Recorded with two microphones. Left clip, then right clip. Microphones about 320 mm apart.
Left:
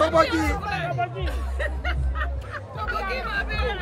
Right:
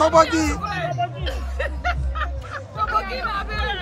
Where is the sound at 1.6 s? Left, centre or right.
Centre.